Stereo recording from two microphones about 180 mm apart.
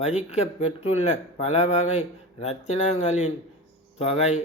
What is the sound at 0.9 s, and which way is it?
Speech, 35° left (ahead or behind).